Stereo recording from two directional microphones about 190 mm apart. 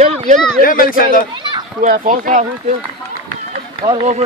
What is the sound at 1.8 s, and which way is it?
Speech, 45° right (ahead or behind).